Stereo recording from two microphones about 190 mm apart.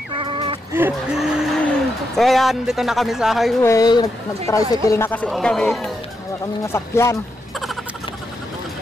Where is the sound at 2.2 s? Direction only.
Centre (ahead or behind).